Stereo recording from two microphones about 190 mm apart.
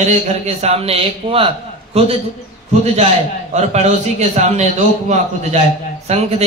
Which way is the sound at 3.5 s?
35° right (ahead or behind).